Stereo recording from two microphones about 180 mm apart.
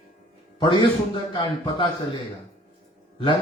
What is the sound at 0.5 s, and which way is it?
A man's voice, 25° left (ahead or behind).